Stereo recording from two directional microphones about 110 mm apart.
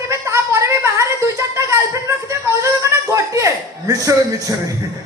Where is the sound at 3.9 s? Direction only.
30° right (ahead or behind).